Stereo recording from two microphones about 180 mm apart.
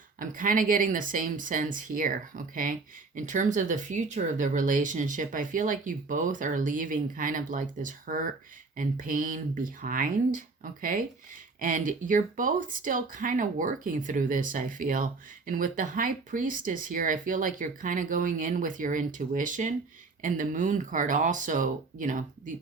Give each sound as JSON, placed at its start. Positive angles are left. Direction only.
{"t": 0.2, "sound": "speech", "side_deg": -50}